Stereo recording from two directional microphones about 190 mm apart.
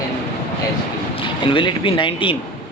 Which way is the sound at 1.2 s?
25° left (ahead or behind).